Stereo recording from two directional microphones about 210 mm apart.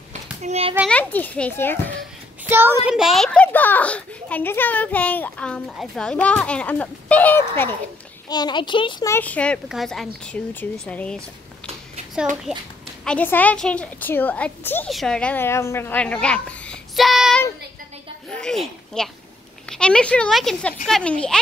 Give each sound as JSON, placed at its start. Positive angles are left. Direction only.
{"t": 0.4, "sound": "a child's voice", "side_deg": -30}
{"t": 0.8, "sound": "a child's voice", "side_deg": 5}
{"t": 2.4, "sound": "a child's voice", "side_deg": -10}
{"t": 9.1, "sound": "a woman's voice", "side_deg": 5}
{"t": 12.5, "sound": "a woman's voice", "side_deg": -5}
{"t": 13.0, "sound": "a woman's voice", "side_deg": 5}
{"t": 18.3, "sound": "a sound", "side_deg": 5}
{"t": 19.7, "sound": "a woman's voice", "side_deg": 5}